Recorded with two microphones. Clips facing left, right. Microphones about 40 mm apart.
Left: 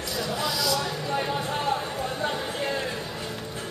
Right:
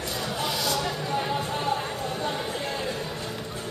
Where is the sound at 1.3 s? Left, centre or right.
Centre.